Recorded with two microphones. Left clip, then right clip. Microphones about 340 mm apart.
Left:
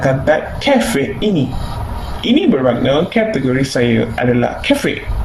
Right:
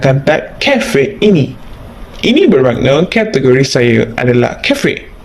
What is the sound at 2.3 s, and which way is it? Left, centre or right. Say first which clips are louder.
Speech: right 4 dB; right.